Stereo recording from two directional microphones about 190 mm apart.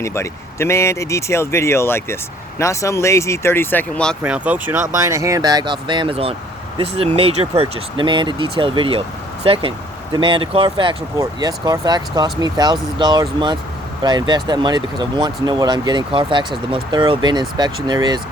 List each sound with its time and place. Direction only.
0.0 s speech: 15° left (ahead or behind)
4.2 s speech: 10° right (ahead or behind)